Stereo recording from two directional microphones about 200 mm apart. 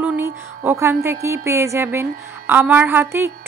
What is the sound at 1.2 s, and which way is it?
A woman's voice, 15° right (ahead or behind).